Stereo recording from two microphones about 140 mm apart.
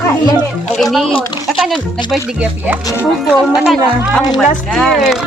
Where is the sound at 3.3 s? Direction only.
Centre (ahead or behind).